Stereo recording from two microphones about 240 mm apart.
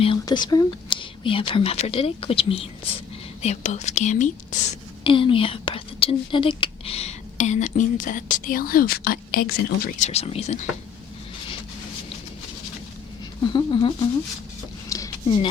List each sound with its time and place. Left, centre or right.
0.0 s speech: centre; by 10.1 s left
10.1 s speech: left
13.4 s speech: centre
14.8 s a sound: centre